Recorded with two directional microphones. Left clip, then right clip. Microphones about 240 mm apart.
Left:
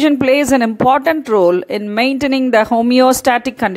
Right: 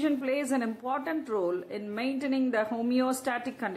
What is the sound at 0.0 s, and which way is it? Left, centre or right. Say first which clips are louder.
Speech: left 17 dB; left.